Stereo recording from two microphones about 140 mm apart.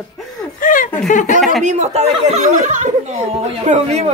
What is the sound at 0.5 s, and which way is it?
Speech, 75° left (ahead or behind).